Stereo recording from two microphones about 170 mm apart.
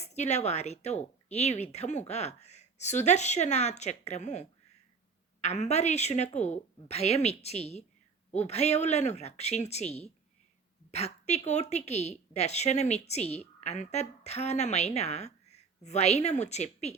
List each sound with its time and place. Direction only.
0.0 s a woman's voice: 40° left (ahead or behind)